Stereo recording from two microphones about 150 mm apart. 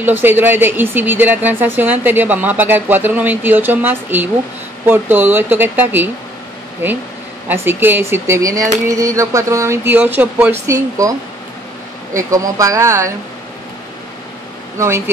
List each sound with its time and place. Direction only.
0.0 s speech: 15° right (ahead or behind)
7.4 s speech: 15° right (ahead or behind)
10.7 s speech: 20° right (ahead or behind)
12.2 s speech: 20° right (ahead or behind)